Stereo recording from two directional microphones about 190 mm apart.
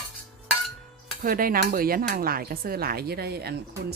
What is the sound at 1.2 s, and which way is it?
Speech, 50° right (ahead or behind).